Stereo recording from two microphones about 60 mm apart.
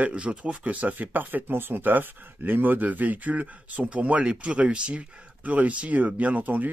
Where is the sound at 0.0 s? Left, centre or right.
Centre.